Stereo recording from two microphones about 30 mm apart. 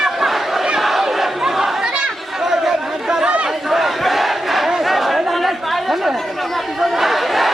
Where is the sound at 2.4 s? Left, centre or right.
Centre.